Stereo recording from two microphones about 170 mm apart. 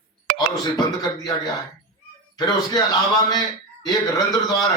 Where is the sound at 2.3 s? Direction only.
25° left (ahead or behind).